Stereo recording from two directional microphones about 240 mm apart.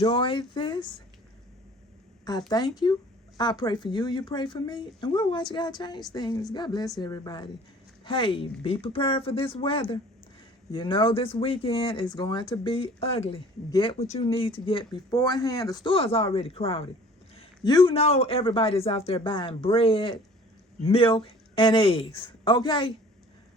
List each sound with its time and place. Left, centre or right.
0.0 s speech: left
2.5 s speech: centre